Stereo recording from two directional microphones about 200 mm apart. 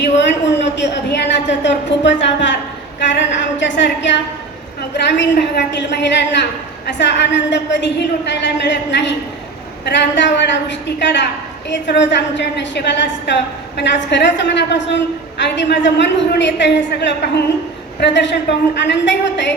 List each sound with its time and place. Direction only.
0.0 s a woman's voice: 60° left (ahead or behind)